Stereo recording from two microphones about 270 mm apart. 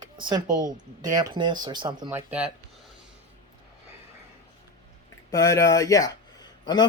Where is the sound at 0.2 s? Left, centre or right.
Centre.